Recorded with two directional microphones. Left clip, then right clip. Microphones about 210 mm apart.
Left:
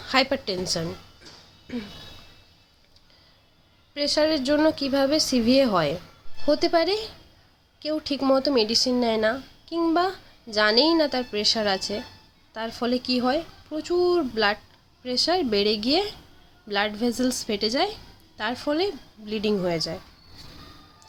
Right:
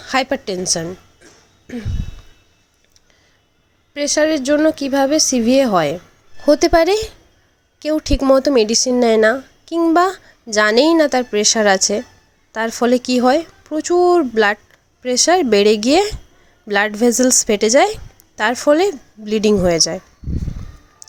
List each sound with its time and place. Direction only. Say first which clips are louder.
0.0 s a woman's voice: right 4 dB; 25° right (ahead or behind)
0.7 s a sound: right 8 dB; 20° right (ahead or behind)
3.9 s a woman's voice: right 6 dB; 30° right (ahead or behind); by 20.0 s 45° right (ahead or behind)